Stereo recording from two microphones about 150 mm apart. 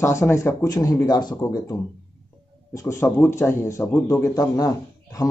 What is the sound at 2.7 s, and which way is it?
A man's voice, 20° left (ahead or behind).